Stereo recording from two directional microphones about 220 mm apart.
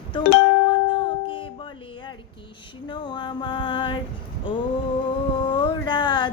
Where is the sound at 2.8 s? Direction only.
20° left (ahead or behind).